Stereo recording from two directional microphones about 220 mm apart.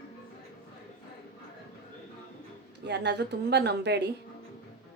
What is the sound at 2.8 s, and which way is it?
A woman's voice, 50° right (ahead or behind).